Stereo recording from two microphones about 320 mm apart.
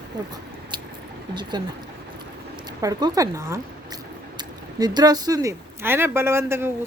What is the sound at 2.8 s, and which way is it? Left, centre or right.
Speech, centre.